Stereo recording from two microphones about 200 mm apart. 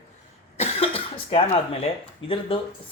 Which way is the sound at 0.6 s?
30° left (ahead or behind).